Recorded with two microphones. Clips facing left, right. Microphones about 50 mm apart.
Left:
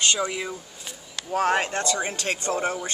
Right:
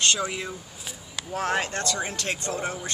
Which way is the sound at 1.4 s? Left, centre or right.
Centre.